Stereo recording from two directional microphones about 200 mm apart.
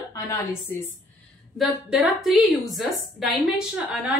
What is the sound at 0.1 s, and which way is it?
Speech, 15° left (ahead or behind).